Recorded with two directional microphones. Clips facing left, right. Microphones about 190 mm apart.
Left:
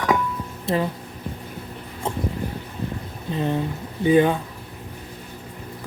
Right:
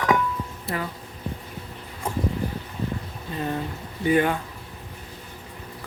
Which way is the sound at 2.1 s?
25° left (ahead or behind).